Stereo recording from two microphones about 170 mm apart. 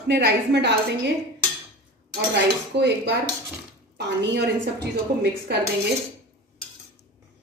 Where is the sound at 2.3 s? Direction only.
90° right.